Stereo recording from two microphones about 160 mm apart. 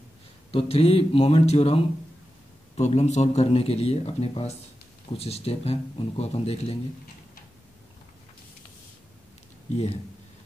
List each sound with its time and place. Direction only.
0.5 s speech: 35° left (ahead or behind)